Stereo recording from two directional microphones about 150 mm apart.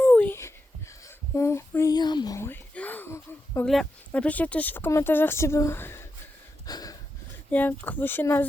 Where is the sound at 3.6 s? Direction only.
5° left (ahead or behind).